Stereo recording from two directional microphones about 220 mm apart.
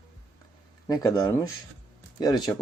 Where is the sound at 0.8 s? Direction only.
20° left (ahead or behind).